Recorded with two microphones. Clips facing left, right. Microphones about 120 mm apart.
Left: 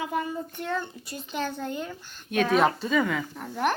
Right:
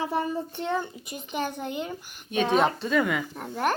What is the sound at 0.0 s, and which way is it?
Speech, 35° right (ahead or behind).